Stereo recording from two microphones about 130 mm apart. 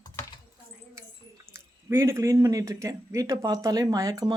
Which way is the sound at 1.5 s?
20° right (ahead or behind).